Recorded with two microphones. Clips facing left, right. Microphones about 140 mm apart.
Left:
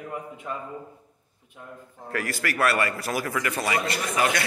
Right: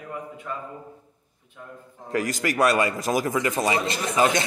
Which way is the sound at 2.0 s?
20° right (ahead or behind).